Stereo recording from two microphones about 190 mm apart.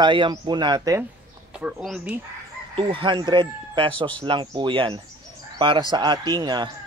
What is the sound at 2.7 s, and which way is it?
Speech, 25° right (ahead or behind).